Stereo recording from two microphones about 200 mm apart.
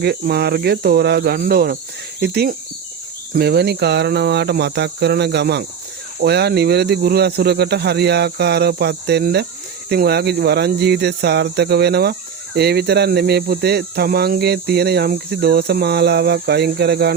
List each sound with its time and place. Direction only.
0.0 s speech: 55° right (ahead or behind)